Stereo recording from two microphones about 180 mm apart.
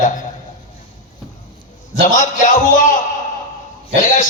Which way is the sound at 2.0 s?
45° left (ahead or behind).